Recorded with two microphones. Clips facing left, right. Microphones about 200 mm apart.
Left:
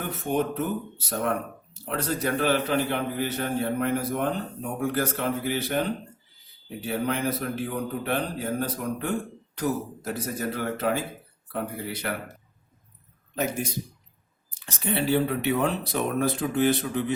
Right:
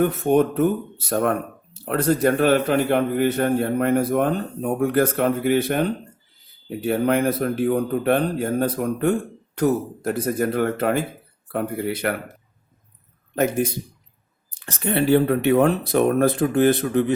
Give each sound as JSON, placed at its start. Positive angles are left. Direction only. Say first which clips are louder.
{"t": 0.0, "sound": "a man's voice", "louder": "right 9 dB", "side_deg": -55}
{"t": 13.3, "sound": "speech", "louder": "right 7 dB", "side_deg": -55}